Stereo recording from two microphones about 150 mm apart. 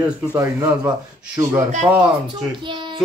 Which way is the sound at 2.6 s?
35° right (ahead or behind).